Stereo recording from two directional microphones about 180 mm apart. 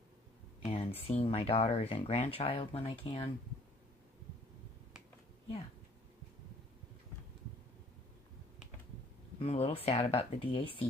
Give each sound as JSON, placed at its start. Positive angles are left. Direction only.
{"t": 0.6, "sound": "a sound", "side_deg": 30}
{"t": 1.2, "sound": "speech", "side_deg": 30}
{"t": 9.4, "sound": "speech", "side_deg": 35}